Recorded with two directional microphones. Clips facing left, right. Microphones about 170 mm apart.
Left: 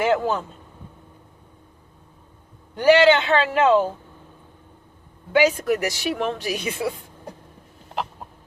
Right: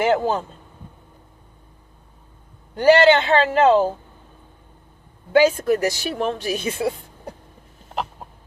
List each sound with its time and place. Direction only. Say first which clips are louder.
0.0 s speech: right 2 dB; 30° right (ahead or behind)
2.7 s speech: right 1 dB; 35° right (ahead or behind)
5.3 s speech: right 3 dB; 30° right (ahead or behind)